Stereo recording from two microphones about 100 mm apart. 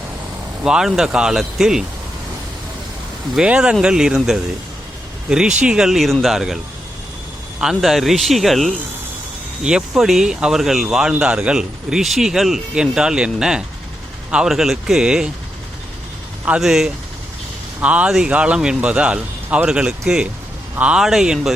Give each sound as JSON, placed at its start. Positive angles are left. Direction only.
{"t": 0.6, "sound": "speech", "side_deg": -5}
{"t": 3.3, "sound": "speech", "side_deg": -10}
{"t": 7.6, "sound": "speech", "side_deg": -5}
{"t": 16.6, "sound": "speech", "side_deg": -5}